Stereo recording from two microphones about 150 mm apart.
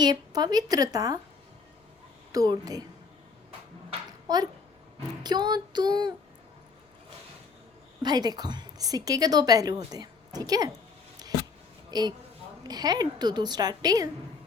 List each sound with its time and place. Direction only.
0.0 s a woman's voice: 25° right (ahead or behind)
2.3 s a woman's voice: 25° right (ahead or behind)
4.3 s a woman's voice: 25° right (ahead or behind)
8.0 s a woman's voice: 25° right (ahead or behind)
11.9 s a woman's voice: 25° right (ahead or behind)